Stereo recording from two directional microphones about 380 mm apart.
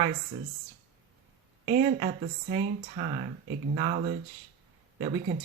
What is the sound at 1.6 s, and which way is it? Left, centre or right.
Speech, right.